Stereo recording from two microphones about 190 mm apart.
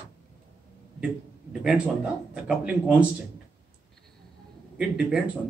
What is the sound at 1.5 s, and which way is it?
A man's voice, 5° right (ahead or behind).